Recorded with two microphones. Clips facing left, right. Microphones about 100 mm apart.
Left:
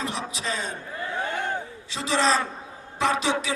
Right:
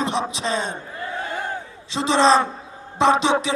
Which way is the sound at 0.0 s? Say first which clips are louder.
Right 7 dB; 25° right (ahead or behind).